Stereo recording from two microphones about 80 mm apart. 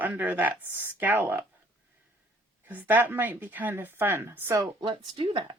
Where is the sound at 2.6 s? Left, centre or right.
Right.